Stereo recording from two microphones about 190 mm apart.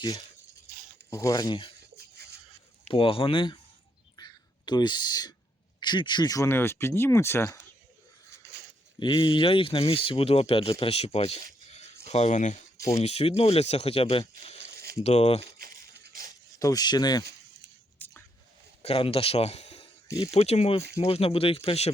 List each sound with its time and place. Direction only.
1.1 s speech: 15° left (ahead or behind)
2.0 s a sound: 55° right (ahead or behind)
2.9 s speech: 30° left (ahead or behind)
4.2 s whispering: 20° left (ahead or behind)
5.8 s speech: 25° left (ahead or behind)
8.5 s a sound: 60° right (ahead or behind)
9.0 s speech: 25° left (ahead or behind)
14.6 s zipper: 55° right (ahead or behind)
15.0 s speech: 35° left (ahead or behind)
15.5 s crushing: 50° right (ahead or behind)
16.6 s speech: 20° left (ahead or behind)
18.0 s a sound: 10° left (ahead or behind)
18.8 s speech: 30° left (ahead or behind)